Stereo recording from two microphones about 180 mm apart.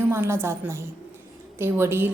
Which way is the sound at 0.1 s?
15° right (ahead or behind).